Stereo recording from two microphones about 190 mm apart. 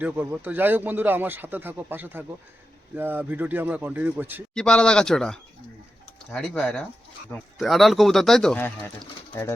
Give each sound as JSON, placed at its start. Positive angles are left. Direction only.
{"t": 0.0, "sound": "speech", "side_deg": -10}
{"t": 4.5, "sound": "speech", "side_deg": 5}